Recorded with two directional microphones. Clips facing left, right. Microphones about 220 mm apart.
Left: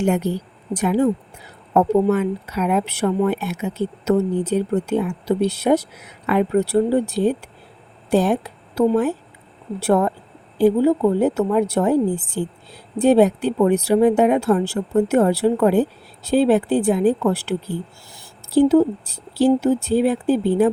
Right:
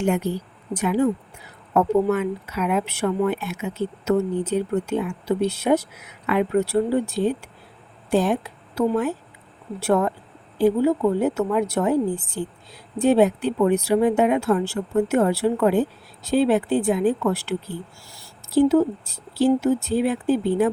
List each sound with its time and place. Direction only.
0.7 s speech: 35° left (ahead or behind)
9.8 s speech: 35° left (ahead or behind)
13.0 s speech: 35° left (ahead or behind)
18.5 s speech: 30° left (ahead or behind)